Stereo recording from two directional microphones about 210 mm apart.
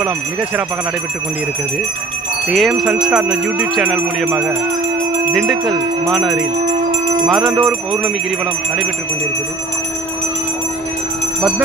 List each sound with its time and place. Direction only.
2.5 s jingle bell: centre (ahead or behind)